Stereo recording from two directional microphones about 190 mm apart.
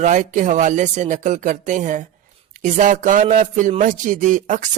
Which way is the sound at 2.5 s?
45° right (ahead or behind).